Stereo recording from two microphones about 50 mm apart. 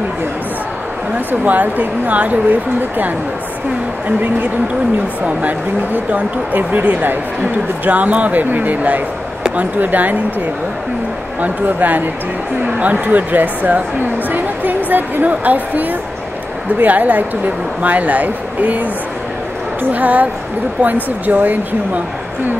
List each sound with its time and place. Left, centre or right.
1.4 s speech: right
6.1 s speech: right
11.4 s speech: right